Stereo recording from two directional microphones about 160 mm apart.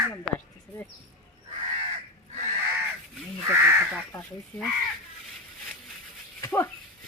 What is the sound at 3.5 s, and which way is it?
Crow, 15° right (ahead or behind).